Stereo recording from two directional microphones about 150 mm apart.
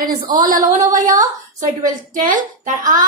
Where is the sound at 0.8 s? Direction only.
60° right (ahead or behind).